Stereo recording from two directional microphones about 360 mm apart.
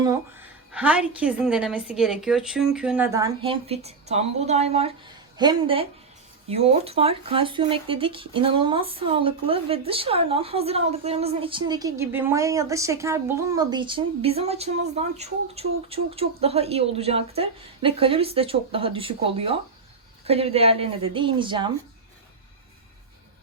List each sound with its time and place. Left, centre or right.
0.7 s a woman's voice: centre